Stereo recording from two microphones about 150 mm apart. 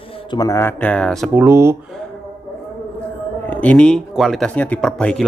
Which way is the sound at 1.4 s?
15° right (ahead or behind).